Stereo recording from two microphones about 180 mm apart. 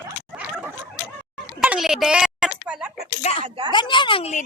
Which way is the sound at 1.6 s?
5° right (ahead or behind).